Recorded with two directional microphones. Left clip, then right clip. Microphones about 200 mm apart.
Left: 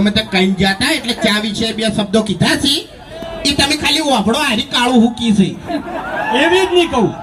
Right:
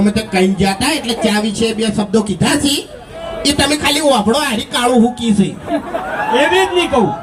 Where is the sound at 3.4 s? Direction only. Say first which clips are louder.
Even; 30° left (ahead or behind).